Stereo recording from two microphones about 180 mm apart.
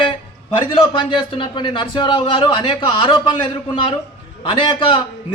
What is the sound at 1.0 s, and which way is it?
A man's voice, 25° left (ahead or behind).